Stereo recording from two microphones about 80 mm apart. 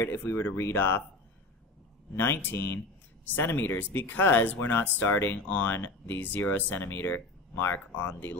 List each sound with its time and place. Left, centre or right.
0.0 s speech: left
2.1 s speech: left
3.3 s speech: left